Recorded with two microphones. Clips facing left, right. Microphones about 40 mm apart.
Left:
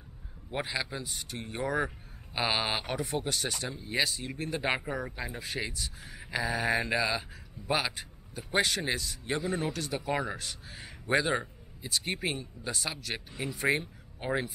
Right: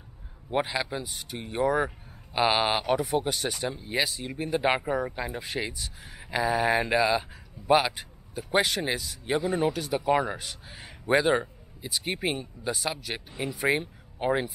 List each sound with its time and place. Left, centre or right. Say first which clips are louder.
0.6 s speech: right 6 dB; centre